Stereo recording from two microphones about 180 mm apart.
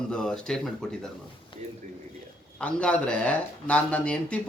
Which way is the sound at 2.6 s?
5° left (ahead or behind).